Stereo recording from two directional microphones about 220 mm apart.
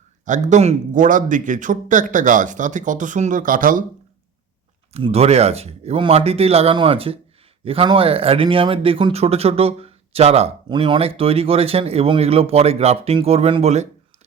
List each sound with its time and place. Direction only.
0.3 s a man's voice: 35° right (ahead or behind)
4.9 s speech: 25° right (ahead or behind)